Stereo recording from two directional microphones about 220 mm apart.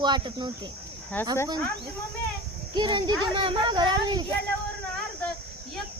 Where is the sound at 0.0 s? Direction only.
20° right (ahead or behind).